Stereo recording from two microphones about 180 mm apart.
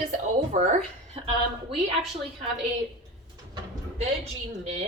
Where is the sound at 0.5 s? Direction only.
45° right (ahead or behind).